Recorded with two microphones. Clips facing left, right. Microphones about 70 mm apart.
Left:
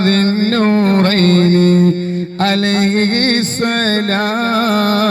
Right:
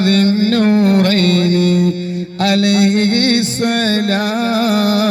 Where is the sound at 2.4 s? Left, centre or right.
Left.